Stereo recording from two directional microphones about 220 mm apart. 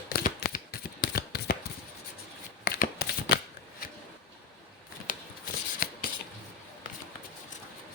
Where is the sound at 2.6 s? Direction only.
45° left (ahead or behind).